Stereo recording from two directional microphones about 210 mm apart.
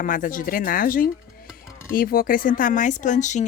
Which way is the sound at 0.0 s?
40° left (ahead or behind).